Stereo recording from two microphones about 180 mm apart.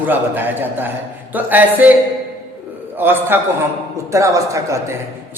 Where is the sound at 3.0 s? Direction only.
10° right (ahead or behind).